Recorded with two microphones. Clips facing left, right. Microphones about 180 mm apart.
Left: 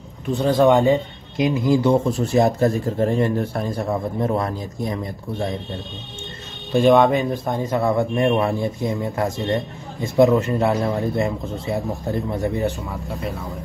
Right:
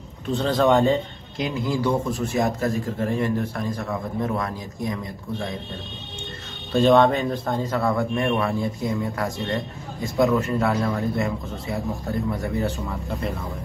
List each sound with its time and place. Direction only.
0.3 s a man's voice: 15° left (ahead or behind); by 5.5 s 30° left (ahead or behind)
6.7 s a man's voice: 15° left (ahead or behind)